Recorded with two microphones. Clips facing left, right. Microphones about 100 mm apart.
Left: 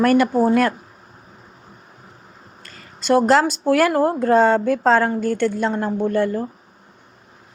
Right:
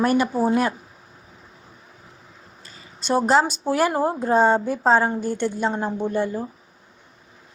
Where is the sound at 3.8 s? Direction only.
20° right (ahead or behind).